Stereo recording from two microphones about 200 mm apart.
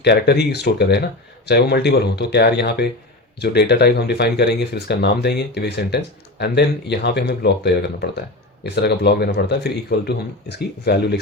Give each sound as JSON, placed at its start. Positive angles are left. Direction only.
{"t": 0.0, "sound": "speech", "side_deg": 55}